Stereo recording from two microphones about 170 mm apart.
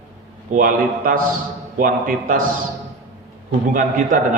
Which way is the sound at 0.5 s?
55° right (ahead or behind).